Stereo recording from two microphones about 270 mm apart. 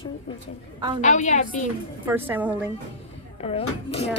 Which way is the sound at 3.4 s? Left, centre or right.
Left.